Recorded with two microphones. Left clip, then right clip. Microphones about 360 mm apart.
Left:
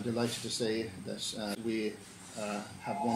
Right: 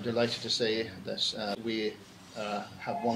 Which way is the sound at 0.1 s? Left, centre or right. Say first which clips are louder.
Right 6 dB; right.